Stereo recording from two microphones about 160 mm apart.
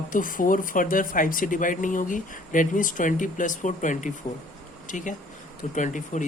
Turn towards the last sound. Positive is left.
turn(degrees=50)  # may be behind; listen again after turning